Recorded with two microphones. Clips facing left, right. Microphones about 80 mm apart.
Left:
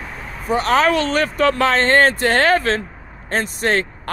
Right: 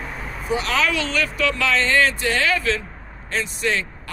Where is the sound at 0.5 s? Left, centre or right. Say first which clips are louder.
Left 6 dB; left.